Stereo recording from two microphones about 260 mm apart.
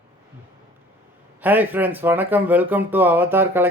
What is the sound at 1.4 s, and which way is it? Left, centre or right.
Speech, centre.